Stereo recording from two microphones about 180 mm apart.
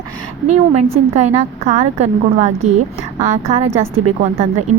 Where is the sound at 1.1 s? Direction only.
40° right (ahead or behind).